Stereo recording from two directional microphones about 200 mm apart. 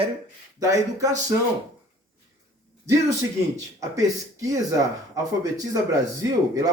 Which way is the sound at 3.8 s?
15° right (ahead or behind).